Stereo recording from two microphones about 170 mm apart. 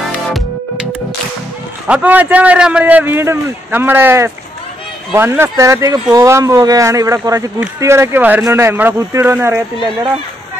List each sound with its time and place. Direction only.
1.9 s a man's voice: 10° right (ahead or behind)